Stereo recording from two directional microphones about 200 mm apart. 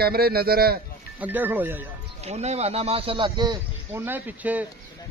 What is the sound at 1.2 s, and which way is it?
Speech, 10° right (ahead or behind).